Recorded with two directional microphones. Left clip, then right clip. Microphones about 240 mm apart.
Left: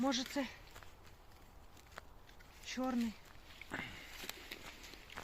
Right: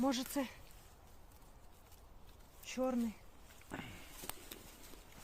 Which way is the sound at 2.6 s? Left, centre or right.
Right.